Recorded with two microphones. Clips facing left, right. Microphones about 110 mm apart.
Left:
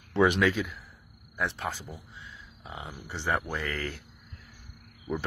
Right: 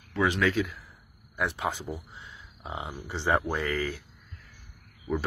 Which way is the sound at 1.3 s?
15° right (ahead or behind).